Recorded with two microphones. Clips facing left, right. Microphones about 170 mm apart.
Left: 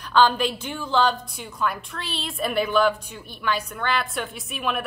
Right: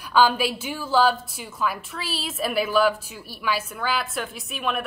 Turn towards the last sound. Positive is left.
turn(degrees=0)  # may be behind; listen again after turning